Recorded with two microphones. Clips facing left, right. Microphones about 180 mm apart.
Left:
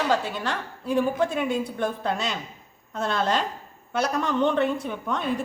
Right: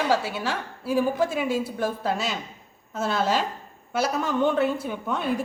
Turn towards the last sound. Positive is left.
turn(degrees=-5)  # may be behind; listen again after turning